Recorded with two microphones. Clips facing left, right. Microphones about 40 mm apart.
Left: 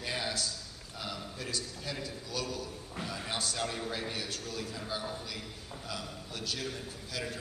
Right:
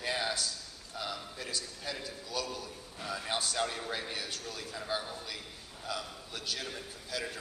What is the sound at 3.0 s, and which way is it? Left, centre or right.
A man's voice, centre.